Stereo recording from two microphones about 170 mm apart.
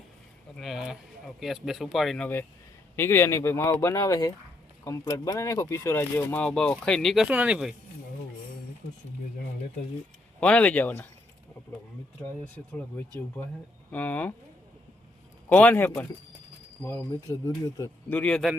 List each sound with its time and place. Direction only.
0.6 s speech: 5° right (ahead or behind)
10.4 s speech: 5° left (ahead or behind)
12.2 s speech: 10° left (ahead or behind)
15.4 s speech: 10° left (ahead or behind)